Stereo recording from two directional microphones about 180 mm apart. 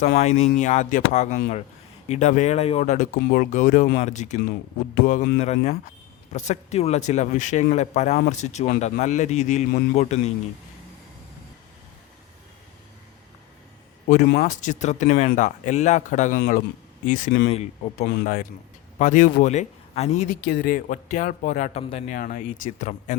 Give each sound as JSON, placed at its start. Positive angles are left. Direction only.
{"t": 0.0, "sound": "speech", "side_deg": 40}
{"t": 14.3, "sound": "a man's voice", "side_deg": 50}
{"t": 18.9, "sound": "speech", "side_deg": 45}
{"t": 20.4, "sound": "speech", "side_deg": 55}
{"t": 22.1, "sound": "speech", "side_deg": 50}